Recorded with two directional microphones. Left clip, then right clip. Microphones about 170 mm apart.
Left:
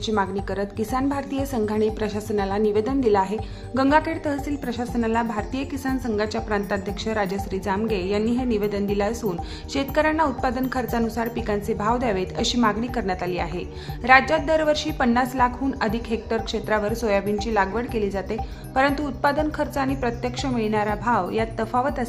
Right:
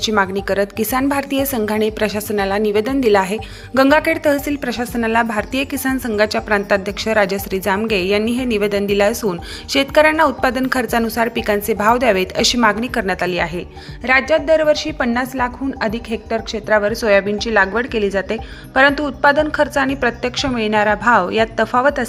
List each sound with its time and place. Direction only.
0.0 s a woman's voice: 20° right (ahead or behind)